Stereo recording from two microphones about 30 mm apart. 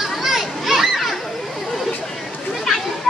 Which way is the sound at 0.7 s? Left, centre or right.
Centre.